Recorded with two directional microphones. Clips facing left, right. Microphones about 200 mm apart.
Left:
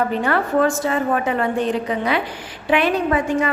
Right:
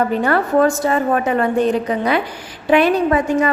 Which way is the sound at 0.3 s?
40° right (ahead or behind).